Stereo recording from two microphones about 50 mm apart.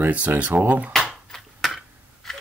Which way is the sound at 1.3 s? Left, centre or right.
Centre.